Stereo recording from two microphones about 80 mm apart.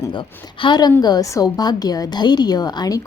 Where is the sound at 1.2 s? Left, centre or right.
Left.